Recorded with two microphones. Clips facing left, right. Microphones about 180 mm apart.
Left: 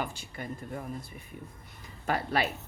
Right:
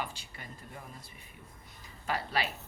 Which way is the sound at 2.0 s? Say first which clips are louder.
Left 4 dB; 50° left (ahead or behind).